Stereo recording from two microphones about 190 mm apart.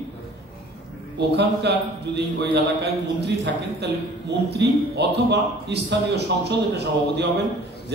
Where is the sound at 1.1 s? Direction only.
65° right (ahead or behind).